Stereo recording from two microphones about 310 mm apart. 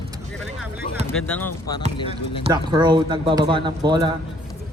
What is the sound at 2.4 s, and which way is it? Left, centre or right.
Speech, centre.